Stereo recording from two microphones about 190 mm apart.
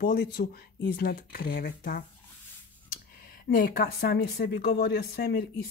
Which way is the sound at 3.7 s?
55° left (ahead or behind).